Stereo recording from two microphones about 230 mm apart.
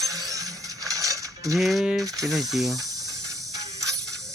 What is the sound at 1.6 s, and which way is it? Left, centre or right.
Speech, centre.